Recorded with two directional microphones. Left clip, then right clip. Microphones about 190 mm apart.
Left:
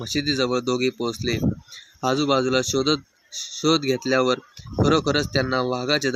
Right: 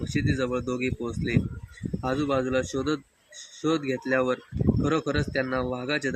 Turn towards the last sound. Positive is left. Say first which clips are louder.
# left 6 dB
turn(degrees=40)  # may be behind; listen again after turning